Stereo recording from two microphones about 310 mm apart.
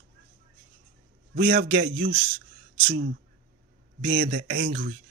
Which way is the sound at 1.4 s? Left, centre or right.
Right.